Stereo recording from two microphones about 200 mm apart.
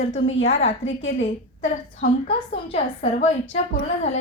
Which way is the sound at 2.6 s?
30° left (ahead or behind).